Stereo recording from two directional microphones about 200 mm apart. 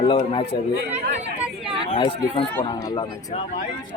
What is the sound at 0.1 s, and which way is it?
Speech, 25° left (ahead or behind).